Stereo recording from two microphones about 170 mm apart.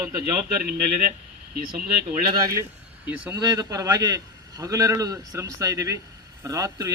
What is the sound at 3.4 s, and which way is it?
A man's voice, 20° right (ahead or behind).